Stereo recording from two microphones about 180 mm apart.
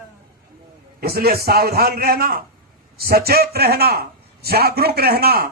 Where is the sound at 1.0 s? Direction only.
60° right (ahead or behind).